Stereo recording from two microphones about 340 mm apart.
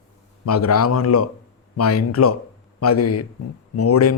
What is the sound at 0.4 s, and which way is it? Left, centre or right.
A man's voice, left.